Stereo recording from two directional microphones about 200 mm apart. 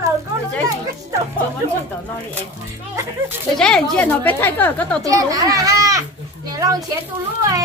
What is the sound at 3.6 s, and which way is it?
Speech, 5° left (ahead or behind).